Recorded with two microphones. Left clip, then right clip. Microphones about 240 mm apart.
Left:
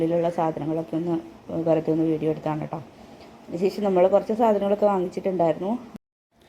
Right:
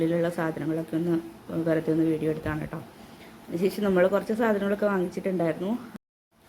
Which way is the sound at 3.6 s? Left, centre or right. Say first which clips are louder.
Left 3 dB; centre.